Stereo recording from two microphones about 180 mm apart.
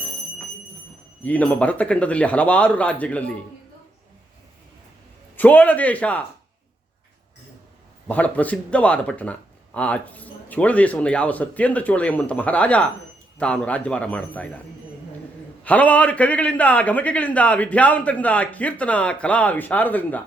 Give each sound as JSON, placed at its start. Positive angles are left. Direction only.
{"t": 1.2, "sound": "a man's voice", "side_deg": 10}
{"t": 5.4, "sound": "a man's voice", "side_deg": 10}
{"t": 8.0, "sound": "a man's voice", "side_deg": 10}
{"t": 15.6, "sound": "a man's voice", "side_deg": 10}